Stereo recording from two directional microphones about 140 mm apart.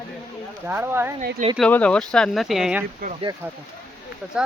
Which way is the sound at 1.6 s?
10° left (ahead or behind).